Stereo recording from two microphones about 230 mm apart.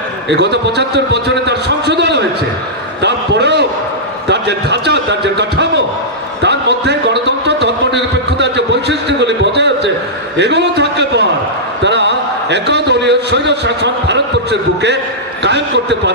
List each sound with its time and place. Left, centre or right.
0.3 s a man's voice: right
3.0 s a sound: right
15.4 s a man's voice: right